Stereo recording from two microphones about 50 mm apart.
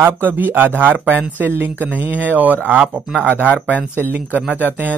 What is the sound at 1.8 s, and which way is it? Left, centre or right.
Speech, right.